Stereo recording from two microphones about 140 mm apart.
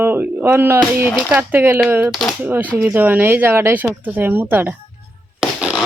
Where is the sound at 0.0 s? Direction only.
15° right (ahead or behind).